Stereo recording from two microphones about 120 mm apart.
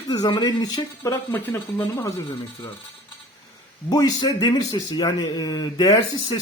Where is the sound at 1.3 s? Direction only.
15° left (ahead or behind).